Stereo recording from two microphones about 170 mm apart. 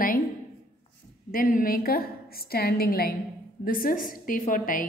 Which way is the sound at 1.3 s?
55° left (ahead or behind).